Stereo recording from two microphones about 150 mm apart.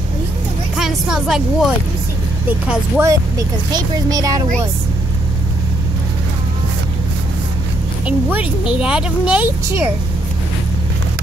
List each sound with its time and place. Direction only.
0.7 s speech: 5° right (ahead or behind)
3.1 s speech: 25° right (ahead or behind)
8.0 s speech: 10° right (ahead or behind)